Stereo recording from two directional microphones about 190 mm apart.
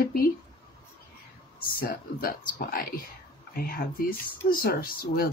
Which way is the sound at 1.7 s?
50° left (ahead or behind).